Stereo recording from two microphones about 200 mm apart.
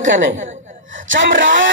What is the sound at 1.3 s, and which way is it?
Speech, 40° right (ahead or behind).